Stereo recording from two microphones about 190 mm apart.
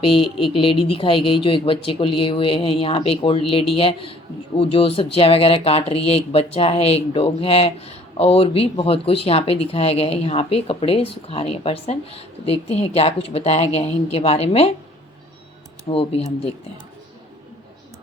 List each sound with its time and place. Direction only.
0.0 s speech: 30° left (ahead or behind)
15.9 s speech: 30° left (ahead or behind)